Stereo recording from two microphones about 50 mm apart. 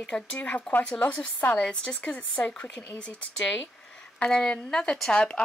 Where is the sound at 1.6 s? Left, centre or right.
Centre.